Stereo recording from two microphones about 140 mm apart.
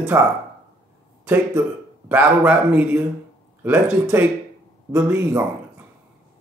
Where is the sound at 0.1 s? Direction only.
15° right (ahead or behind).